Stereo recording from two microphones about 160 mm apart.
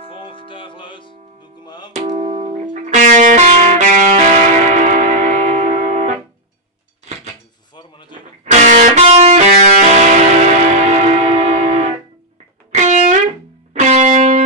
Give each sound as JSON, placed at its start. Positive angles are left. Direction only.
{"t": 0.1, "sound": "music", "side_deg": 30}
{"t": 2.0, "sound": "music", "side_deg": -45}
{"t": 8.1, "sound": "music", "side_deg": -50}